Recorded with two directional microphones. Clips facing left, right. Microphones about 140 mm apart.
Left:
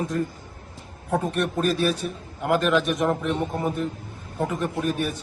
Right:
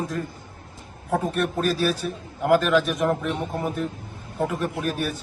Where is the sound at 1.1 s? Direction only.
Centre (ahead or behind).